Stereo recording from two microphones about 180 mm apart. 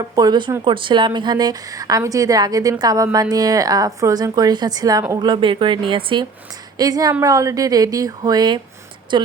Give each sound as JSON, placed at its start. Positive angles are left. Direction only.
{"t": 0.0, "sound": "a woman's voice", "side_deg": -20}